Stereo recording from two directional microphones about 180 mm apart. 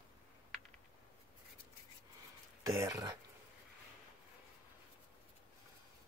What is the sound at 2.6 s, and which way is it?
Speech, 15° right (ahead or behind).